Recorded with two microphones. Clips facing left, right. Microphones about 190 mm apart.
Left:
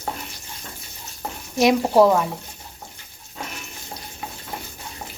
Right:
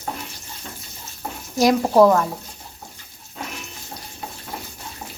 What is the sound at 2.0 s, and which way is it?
Speech, 5° left (ahead or behind).